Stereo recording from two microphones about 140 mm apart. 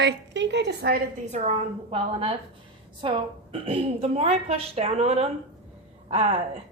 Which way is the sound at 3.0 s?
40° right (ahead or behind).